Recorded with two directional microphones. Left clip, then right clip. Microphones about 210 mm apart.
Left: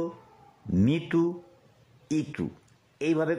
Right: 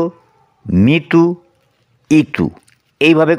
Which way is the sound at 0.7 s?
30° right (ahead or behind).